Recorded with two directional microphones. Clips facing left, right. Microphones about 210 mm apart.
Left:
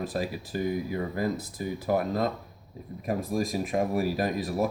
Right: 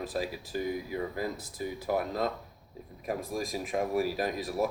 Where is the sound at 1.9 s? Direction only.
45° left (ahead or behind).